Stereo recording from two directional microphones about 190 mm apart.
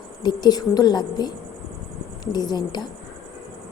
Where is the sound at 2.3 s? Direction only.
20° left (ahead or behind).